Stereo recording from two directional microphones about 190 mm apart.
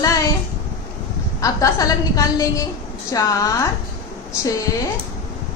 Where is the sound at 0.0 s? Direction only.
15° left (ahead or behind).